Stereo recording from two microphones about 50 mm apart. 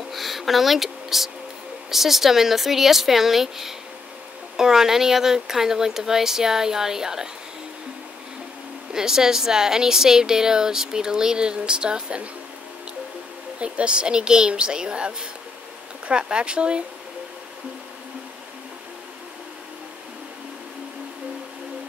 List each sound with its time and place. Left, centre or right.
0.1 s a sound: centre
1.9 s speech: centre
8.9 s speech: centre
13.6 s speech: right